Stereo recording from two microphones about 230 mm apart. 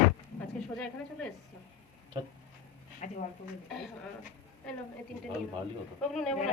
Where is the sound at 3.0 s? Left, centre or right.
Left.